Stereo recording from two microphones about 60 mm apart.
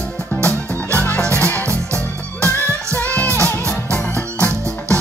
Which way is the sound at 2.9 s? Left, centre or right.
Left.